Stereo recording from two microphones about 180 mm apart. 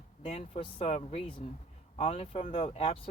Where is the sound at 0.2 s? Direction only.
35° left (ahead or behind).